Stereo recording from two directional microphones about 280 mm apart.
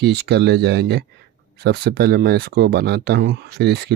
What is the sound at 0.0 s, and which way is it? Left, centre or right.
Speech, right.